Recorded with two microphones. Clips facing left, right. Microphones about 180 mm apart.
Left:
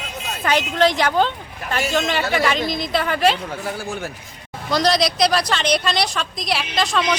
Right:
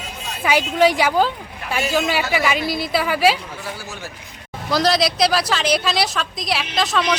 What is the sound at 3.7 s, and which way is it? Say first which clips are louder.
Speech: left 6 dB; 55° left (ahead or behind).